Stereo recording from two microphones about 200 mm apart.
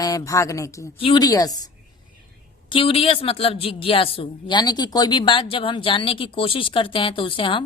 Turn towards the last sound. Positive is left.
turn(degrees=25)  # may be behind; listen again after turning